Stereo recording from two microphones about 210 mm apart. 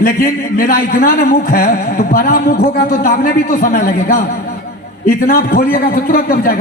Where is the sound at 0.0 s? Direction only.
45° left (ahead or behind).